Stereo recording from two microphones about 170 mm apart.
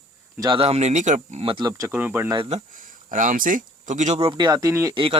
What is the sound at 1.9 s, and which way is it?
Speech, 10° right (ahead or behind).